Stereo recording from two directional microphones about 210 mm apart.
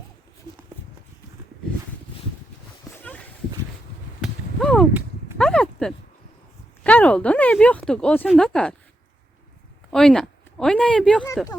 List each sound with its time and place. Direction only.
4.2 s a sound: centre (ahead or behind)
6.8 s speech: 5° left (ahead or behind)
9.9 s speech: 5° left (ahead or behind)